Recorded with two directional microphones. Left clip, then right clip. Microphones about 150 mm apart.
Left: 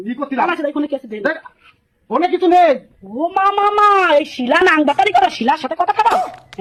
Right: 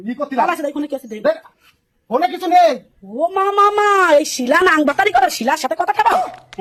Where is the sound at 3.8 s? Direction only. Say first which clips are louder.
Left 1 dB; 30° right (ahead or behind).